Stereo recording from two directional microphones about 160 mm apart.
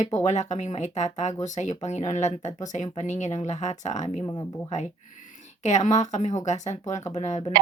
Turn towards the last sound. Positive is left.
turn(degrees=45)  # may be behind; listen again after turning